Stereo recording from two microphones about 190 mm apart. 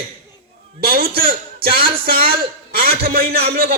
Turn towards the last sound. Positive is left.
turn(degrees=-55)  # may be behind; listen again after turning